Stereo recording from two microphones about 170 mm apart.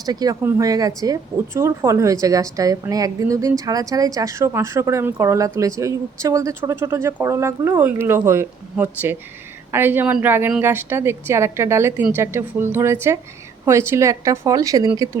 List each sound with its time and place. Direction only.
0.0 s a woman's voice: 20° right (ahead or behind)